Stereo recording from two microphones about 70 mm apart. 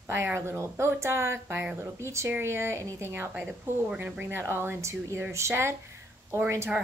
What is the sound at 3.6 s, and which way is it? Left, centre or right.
A woman's voice, right.